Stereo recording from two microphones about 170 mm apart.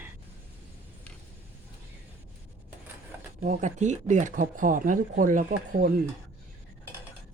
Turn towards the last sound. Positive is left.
turn(degrees=-60)  # may be behind; listen again after turning